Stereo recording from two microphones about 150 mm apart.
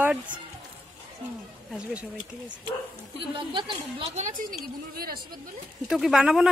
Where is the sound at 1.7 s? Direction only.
10° right (ahead or behind).